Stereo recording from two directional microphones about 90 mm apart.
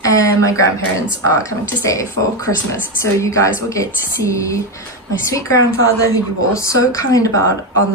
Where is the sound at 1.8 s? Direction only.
35° left (ahead or behind).